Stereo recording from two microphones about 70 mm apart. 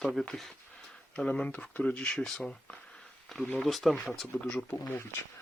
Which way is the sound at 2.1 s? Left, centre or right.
Centre.